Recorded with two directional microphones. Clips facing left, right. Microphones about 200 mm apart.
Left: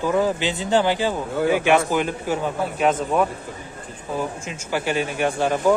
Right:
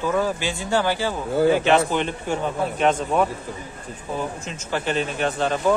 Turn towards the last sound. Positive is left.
turn(degrees=15)  # may be behind; listen again after turning